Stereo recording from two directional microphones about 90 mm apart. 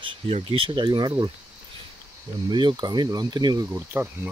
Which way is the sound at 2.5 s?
60° right (ahead or behind).